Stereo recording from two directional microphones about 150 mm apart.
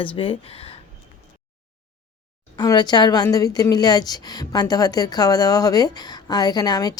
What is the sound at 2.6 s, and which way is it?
A woman's voice, 30° left (ahead or behind).